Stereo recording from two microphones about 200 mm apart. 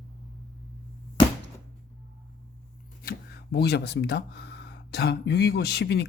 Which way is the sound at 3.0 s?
50° left (ahead or behind).